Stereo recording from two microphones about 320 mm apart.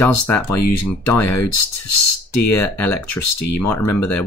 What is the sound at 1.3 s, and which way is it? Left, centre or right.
Speech, left.